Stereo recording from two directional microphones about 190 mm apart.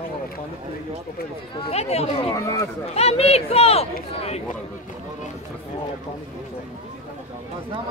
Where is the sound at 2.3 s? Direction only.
15° left (ahead or behind).